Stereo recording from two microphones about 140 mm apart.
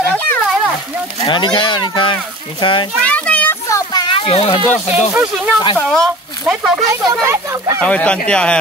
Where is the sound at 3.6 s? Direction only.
25° left (ahead or behind).